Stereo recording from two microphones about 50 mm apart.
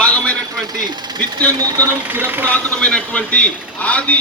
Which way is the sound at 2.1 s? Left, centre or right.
Right.